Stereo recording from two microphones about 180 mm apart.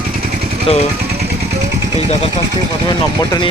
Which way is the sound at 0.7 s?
35° left (ahead or behind).